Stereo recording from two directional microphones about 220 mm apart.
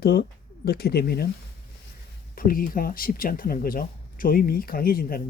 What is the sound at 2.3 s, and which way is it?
Speech, 40° left (ahead or behind).